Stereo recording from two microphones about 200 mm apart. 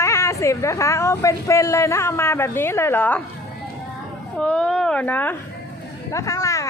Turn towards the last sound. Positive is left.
turn(degrees=15)  # may be behind; listen again after turning